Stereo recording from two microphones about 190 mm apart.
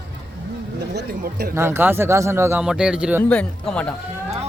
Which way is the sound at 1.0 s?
55° right (ahead or behind).